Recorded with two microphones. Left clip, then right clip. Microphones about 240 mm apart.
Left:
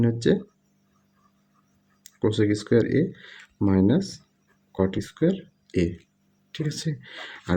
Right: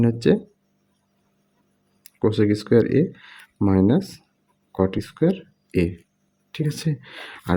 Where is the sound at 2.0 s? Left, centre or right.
Centre.